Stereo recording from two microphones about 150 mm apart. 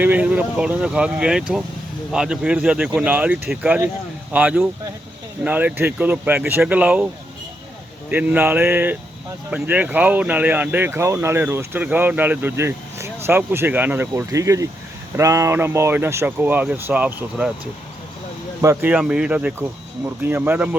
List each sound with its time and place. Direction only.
0.0 s speech: 10° right (ahead or behind)
8.1 s speech: 10° right (ahead or behind)
18.6 s speech: 15° right (ahead or behind)